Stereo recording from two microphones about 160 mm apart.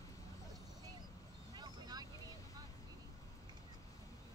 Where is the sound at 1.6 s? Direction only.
25° right (ahead or behind).